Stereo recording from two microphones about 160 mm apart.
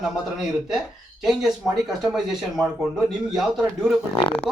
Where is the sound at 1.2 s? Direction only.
Centre (ahead or behind).